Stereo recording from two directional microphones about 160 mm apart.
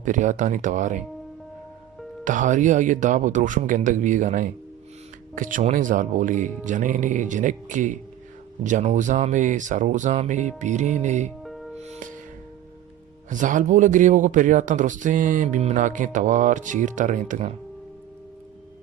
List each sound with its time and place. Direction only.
0.0 s speech: 50° right (ahead or behind)
2.2 s speech: 55° right (ahead or behind)
11.4 s music: centre (ahead or behind)
11.8 s music: 50° right (ahead or behind)
13.3 s speech: 55° right (ahead or behind)